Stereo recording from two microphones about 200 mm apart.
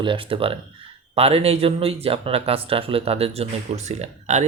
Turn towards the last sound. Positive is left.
turn(degrees=-35)  # may be behind; listen again after turning